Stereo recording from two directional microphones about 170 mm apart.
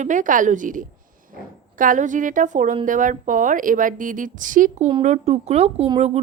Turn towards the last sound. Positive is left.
turn(degrees=-35)  # may be behind; listen again after turning